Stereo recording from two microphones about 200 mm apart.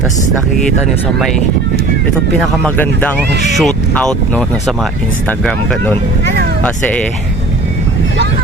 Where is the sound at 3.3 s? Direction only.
60° right (ahead or behind).